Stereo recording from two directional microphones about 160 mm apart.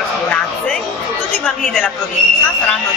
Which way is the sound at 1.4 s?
5° left (ahead or behind).